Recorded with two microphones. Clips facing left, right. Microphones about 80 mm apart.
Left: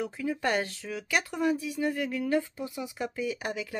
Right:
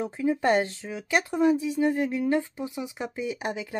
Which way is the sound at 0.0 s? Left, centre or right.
Right.